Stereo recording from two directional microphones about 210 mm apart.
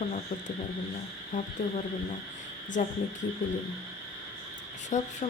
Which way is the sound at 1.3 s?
35° left (ahead or behind).